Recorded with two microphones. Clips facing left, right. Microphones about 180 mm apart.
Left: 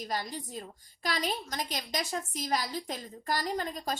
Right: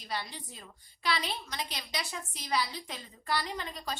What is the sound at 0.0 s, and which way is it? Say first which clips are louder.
A woman's voice: left 4 dB; 40° left (ahead or behind).